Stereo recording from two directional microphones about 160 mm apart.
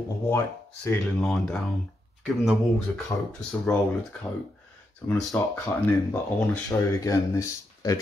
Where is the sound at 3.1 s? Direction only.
25° left (ahead or behind).